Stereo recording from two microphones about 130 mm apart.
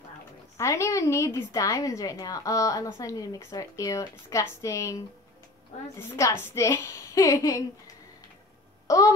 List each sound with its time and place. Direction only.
0.6 s a woman's voice: 20° left (ahead or behind)
5.9 s a woman's voice: 20° left (ahead or behind)